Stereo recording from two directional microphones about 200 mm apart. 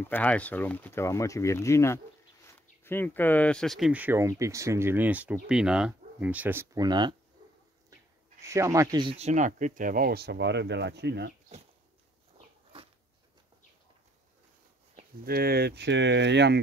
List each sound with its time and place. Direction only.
0.0 s speech: 10° left (ahead or behind); by 7.2 s 20° right (ahead or behind)
8.4 s speech: 15° right (ahead or behind); by 11.3 s 55° right (ahead or behind)
15.2 s speech: 50° right (ahead or behind)